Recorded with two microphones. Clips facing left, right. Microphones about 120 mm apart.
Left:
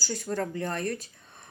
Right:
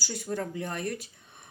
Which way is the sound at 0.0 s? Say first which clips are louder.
Left 2 dB; 15° right (ahead or behind).